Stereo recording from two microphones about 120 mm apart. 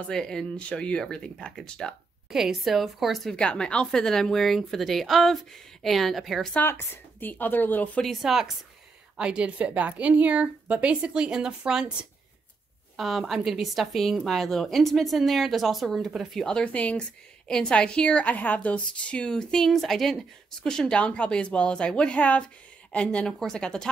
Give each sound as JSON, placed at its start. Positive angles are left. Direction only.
{"t": 0.1, "sound": "speech", "side_deg": 5}
{"t": 6.5, "sound": "a woman's voice", "side_deg": 20}
{"t": 8.0, "sound": "a woman's voice", "side_deg": 0}